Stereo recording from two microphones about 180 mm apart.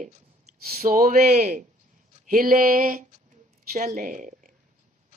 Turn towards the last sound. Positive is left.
turn(degrees=-45)  # may be behind; listen again after turning